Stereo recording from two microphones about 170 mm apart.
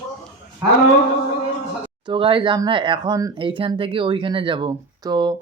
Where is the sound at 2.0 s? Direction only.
30° right (ahead or behind).